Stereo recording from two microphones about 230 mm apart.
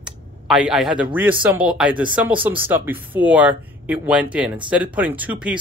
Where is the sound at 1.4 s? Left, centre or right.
Centre.